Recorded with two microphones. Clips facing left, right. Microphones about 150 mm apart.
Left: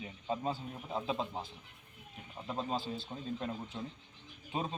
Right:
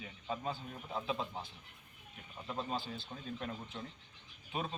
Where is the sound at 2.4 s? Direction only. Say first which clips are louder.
Left 3 dB; 25° left (ahead or behind).